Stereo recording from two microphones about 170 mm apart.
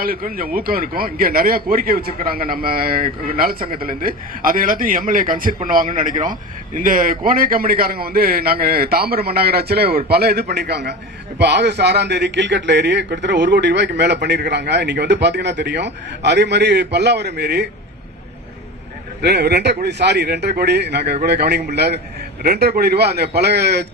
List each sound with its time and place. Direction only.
0.0 s a man's voice: 55° right (ahead or behind); by 17.7 s 75° right (ahead or behind)
19.2 s speech: 75° right (ahead or behind)